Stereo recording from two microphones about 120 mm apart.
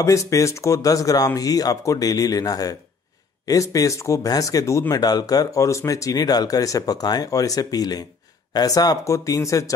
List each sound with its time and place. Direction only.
0.0 s speech: 25° left (ahead or behind)